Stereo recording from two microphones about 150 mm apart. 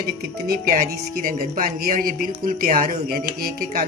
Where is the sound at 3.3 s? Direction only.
80° right.